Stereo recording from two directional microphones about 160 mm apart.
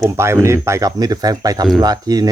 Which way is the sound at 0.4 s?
15° right (ahead or behind).